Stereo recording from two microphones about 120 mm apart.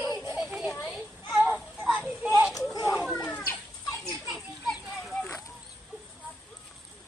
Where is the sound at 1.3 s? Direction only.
15° right (ahead or behind).